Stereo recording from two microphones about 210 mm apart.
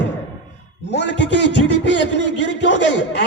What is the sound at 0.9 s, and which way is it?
A man's voice, 55° left (ahead or behind).